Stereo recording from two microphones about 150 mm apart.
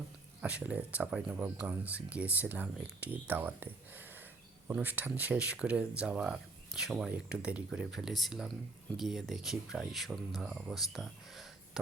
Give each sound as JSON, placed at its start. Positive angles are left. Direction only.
{"t": 0.4, "sound": "speech", "side_deg": -10}